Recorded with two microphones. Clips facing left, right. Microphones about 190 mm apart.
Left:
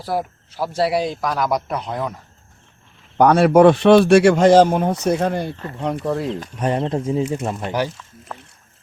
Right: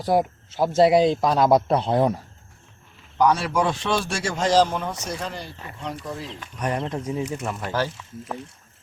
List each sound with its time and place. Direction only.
0.0 s speech: 20° right (ahead or behind)
3.2 s speech: 60° left (ahead or behind)
6.6 s speech: 25° left (ahead or behind)